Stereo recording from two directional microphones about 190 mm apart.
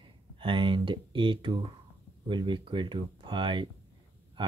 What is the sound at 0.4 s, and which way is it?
Speech, 25° right (ahead or behind).